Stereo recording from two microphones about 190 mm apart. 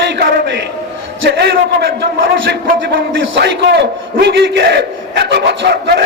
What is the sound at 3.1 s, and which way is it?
A man's voice, 70° right (ahead or behind).